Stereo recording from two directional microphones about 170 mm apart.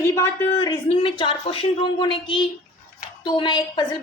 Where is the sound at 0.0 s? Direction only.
15° left (ahead or behind).